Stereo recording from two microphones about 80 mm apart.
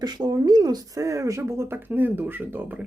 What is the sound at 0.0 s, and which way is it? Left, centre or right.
Speech, right.